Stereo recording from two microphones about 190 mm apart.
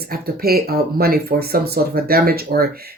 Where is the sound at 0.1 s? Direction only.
50° right (ahead or behind).